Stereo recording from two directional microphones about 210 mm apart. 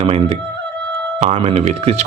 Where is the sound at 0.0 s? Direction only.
30° right (ahead or behind).